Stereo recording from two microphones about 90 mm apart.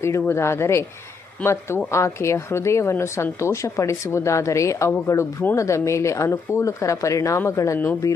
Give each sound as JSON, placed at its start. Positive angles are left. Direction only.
{"t": 0.0, "sound": "speech", "side_deg": 30}